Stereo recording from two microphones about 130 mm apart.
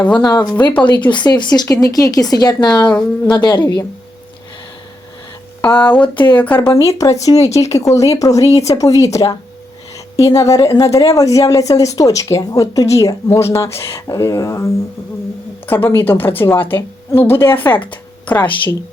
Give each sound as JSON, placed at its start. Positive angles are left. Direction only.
{"t": 0.1, "sound": "speech", "side_deg": 35}
{"t": 5.6, "sound": "a woman's voice", "side_deg": 10}
{"t": 17.9, "sound": "a sound", "side_deg": 10}